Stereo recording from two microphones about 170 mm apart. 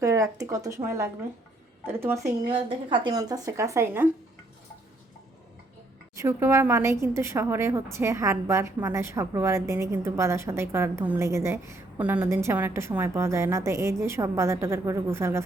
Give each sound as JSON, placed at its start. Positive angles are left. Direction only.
{"t": 0.0, "sound": "a woman's voice", "side_deg": -20}
{"t": 2.5, "sound": "speech", "side_deg": -30}
{"t": 6.1, "sound": "a woman's voice", "side_deg": -15}